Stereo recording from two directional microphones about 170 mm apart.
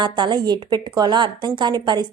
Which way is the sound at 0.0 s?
25° right (ahead or behind).